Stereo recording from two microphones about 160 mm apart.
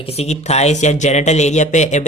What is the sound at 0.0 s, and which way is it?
Speech, 40° left (ahead or behind).